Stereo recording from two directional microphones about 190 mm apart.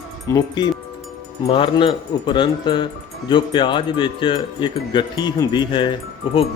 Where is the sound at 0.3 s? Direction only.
20° left (ahead or behind).